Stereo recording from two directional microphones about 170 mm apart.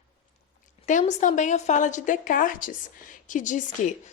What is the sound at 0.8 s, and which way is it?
A woman's voice, 45° left (ahead or behind).